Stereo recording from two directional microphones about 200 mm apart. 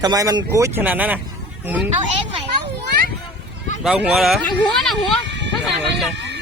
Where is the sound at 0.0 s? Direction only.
20° right (ahead or behind).